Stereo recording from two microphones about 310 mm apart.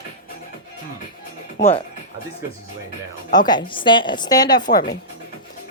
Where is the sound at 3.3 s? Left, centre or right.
Centre.